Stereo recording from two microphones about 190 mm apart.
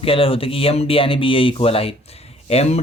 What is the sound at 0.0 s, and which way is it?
A man's voice, 30° left (ahead or behind).